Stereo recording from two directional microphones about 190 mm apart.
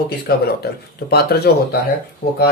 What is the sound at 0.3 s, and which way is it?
Speech, 50° left (ahead or behind).